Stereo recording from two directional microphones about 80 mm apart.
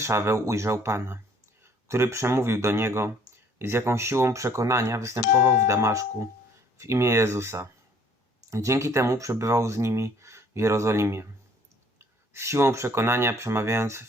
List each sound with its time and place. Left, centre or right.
0.0 s speech: right